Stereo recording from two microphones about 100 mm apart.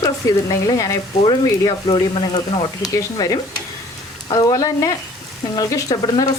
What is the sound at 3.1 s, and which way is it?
Speech, 40° left (ahead or behind).